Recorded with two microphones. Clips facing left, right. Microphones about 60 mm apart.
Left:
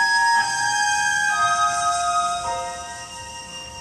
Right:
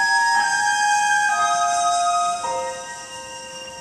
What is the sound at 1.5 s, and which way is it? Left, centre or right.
Music, left.